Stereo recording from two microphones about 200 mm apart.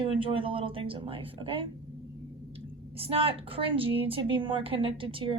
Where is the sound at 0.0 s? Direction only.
25° right (ahead or behind).